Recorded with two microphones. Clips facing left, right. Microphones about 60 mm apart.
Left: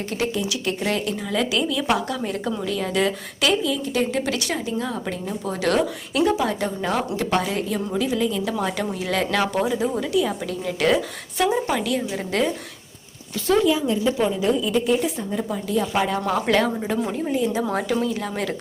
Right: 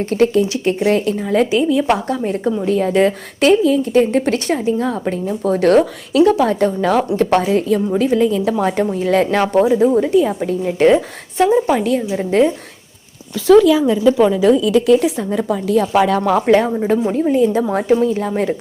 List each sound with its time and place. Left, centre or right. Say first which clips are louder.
0.0 s a woman's voice: right 11 dB; right
11.7 s speech: right 7 dB; right
12.0 s a woman's voice: right 9 dB; right
13.6 s a woman's voice: right 8 dB; right
16.5 s a woman's voice: right 7 dB; right
17.1 s speech: right 9 dB; right
17.6 s a woman's voice: right 8 dB; right